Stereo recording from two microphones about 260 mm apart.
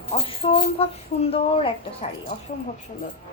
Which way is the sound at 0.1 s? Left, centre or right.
Left.